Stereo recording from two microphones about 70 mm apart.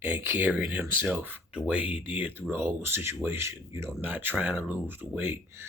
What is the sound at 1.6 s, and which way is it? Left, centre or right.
Speech, centre.